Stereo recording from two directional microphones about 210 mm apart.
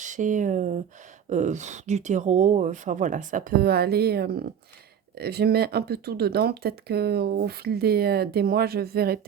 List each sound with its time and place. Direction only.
0.0 s speech: 35° right (ahead or behind)